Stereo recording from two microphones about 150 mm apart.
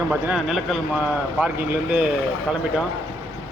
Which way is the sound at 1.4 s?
10° right (ahead or behind).